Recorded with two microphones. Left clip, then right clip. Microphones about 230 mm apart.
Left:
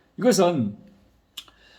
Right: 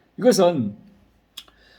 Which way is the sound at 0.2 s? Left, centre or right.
Centre.